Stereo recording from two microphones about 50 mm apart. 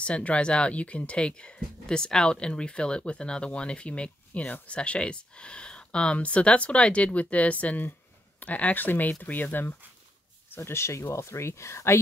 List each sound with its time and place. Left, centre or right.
0.0 s speech: left
10.6 s speech: left